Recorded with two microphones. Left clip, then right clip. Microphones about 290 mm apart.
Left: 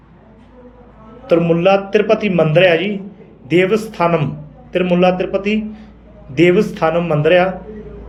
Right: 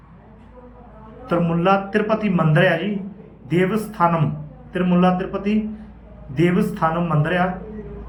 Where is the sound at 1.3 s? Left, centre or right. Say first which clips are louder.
Left 6 dB; left.